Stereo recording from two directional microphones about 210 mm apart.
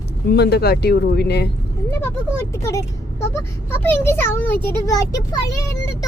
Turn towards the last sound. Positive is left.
turn(degrees=15)  # may be behind; listen again after turning